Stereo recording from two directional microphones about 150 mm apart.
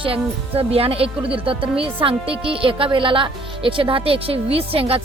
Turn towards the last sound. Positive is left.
turn(degrees=-40)  # may be behind; listen again after turning